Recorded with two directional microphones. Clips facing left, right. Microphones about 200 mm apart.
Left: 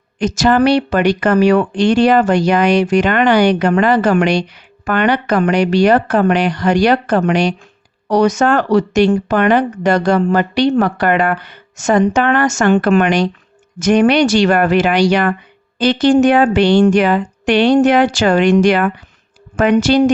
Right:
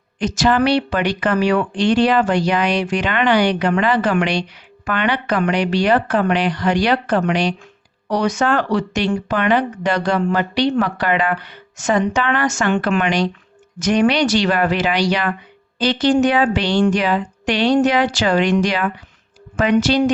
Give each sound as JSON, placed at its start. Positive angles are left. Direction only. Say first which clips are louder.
{"t": 0.2, "sound": "speech", "louder": "left 4 dB", "side_deg": 45}